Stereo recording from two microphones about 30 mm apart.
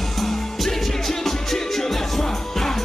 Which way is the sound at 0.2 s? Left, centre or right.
Centre.